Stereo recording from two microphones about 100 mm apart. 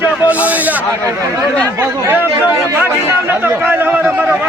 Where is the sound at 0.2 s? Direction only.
15° right (ahead or behind).